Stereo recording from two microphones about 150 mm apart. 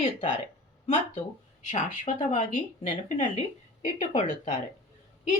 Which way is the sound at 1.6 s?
60° left (ahead or behind).